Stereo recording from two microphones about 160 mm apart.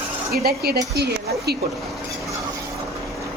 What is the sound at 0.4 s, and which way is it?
Speech, 75° right (ahead or behind).